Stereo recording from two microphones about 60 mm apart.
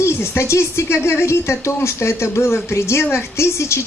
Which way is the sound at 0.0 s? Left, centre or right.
Left.